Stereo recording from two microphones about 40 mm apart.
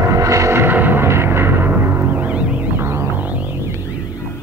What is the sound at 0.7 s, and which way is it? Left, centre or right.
Music, right.